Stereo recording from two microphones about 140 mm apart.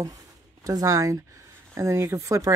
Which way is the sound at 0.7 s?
25° right (ahead or behind).